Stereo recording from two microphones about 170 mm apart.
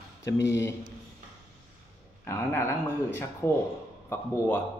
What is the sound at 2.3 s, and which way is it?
A man's voice, 15° left (ahead or behind).